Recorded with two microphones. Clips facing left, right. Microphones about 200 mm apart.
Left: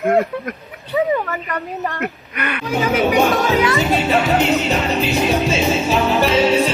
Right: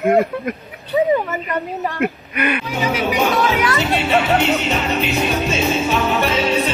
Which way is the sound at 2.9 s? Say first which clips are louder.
Left 3 dB; 50° left (ahead or behind).